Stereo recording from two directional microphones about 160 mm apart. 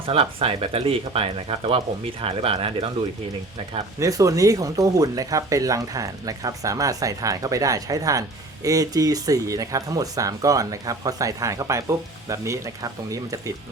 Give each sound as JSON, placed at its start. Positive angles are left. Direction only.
{"t": 0.0, "sound": "speech", "side_deg": -35}
{"t": 4.0, "sound": "speech", "side_deg": -20}